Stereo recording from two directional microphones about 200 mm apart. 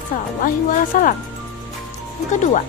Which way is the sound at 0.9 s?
40° left (ahead or behind).